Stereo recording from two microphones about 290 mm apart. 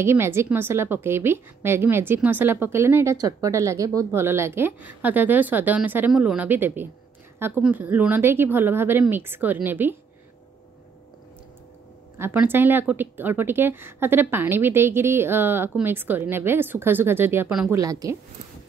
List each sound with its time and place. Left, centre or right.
0.0 s a woman's voice: centre
12.2 s a woman's voice: centre